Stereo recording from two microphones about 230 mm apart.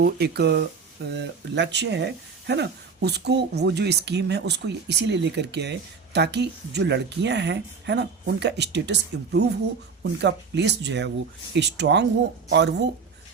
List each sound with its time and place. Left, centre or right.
0.0 s speech: right